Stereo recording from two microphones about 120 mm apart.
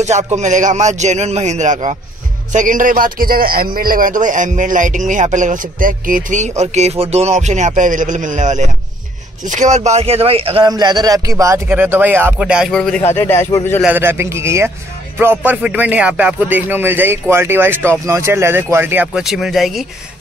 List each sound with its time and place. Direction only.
0.0 s speech: 75° right (ahead or behind); by 2.9 s 90° right
4.1 s speech: 90° right; by 10.6 s 50° right (ahead or behind)
10.6 s a man's voice: 35° right (ahead or behind)
11.6 s speech: 15° right (ahead or behind)
12.7 s speech: 5° left (ahead or behind)
13.0 s a man's voice: 20° left (ahead or behind)
13.8 s speech: 20° right (ahead or behind)
19.1 s speech: 5° right (ahead or behind)